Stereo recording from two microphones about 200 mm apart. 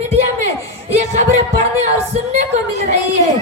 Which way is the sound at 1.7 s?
35° right (ahead or behind).